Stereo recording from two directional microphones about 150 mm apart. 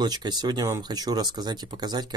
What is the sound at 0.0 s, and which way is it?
Speech, 30° right (ahead or behind).